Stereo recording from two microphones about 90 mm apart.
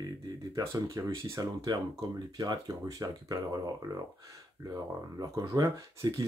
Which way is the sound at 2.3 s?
45° right (ahead or behind).